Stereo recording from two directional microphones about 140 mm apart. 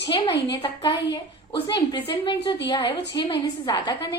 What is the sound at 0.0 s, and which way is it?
A woman's voice, 40° left (ahead or behind).